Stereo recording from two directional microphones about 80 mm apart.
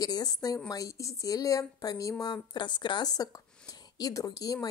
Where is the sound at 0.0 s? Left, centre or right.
Left.